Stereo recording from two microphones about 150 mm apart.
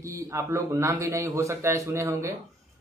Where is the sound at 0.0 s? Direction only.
20° right (ahead or behind).